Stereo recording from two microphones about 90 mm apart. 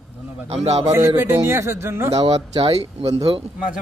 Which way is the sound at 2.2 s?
90° right.